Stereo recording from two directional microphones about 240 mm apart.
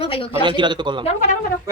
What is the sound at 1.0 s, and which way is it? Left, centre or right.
Speech, left.